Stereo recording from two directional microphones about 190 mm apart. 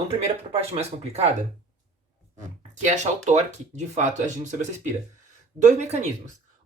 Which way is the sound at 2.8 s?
40° right (ahead or behind).